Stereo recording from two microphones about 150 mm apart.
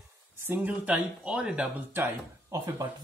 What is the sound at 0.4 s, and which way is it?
Speech, 10° right (ahead or behind).